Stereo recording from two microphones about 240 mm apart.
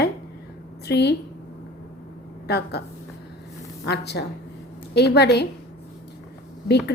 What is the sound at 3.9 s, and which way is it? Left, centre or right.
A woman's voice, left.